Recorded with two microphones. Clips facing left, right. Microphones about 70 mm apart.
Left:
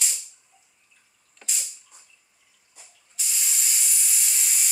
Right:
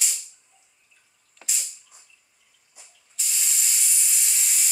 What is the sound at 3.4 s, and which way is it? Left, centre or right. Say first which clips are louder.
Steam: even; centre.